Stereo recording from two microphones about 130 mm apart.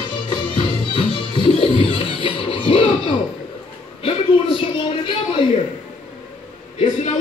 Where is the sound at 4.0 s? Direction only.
45° left (ahead or behind).